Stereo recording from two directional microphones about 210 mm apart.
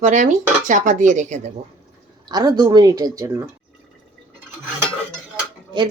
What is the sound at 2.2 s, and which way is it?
Speech, 20° right (ahead or behind).